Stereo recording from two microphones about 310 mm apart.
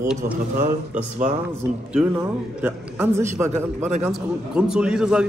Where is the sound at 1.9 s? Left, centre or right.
Centre.